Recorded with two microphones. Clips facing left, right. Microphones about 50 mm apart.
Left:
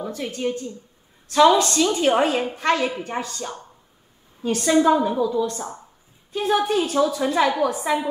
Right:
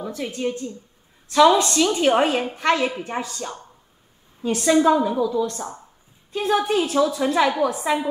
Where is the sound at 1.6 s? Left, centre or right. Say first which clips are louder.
Even; right.